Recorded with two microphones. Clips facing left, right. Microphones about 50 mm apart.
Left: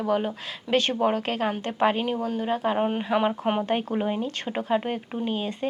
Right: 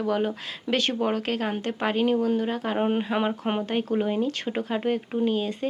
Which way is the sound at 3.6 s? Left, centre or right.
Centre.